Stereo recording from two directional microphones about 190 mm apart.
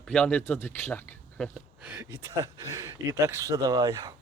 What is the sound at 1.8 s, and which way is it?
Speech, 5° right (ahead or behind).